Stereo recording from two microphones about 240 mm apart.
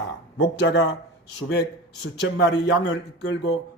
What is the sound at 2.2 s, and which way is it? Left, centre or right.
A man's voice, left.